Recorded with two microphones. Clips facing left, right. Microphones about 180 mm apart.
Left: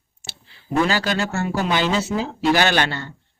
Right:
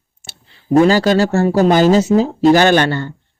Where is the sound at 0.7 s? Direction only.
40° right (ahead or behind).